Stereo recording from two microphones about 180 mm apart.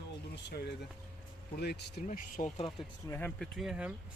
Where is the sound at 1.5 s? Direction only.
65° left (ahead or behind).